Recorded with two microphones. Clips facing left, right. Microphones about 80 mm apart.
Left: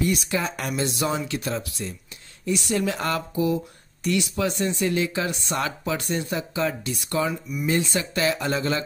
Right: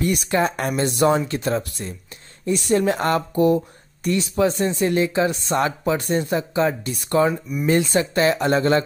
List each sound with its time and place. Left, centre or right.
0.0 s speech: right
4.1 s speech: right